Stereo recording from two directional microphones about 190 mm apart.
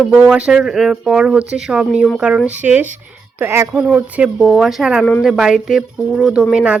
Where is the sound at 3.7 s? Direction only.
Centre (ahead or behind).